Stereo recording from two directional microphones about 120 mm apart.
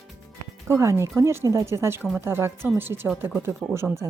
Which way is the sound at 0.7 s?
20° right (ahead or behind).